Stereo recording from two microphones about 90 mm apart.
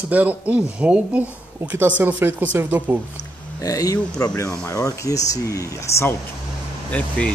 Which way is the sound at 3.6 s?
40° left (ahead or behind).